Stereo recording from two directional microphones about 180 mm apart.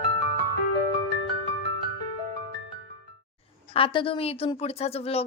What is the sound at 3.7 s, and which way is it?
A woman's voice, 30° left (ahead or behind).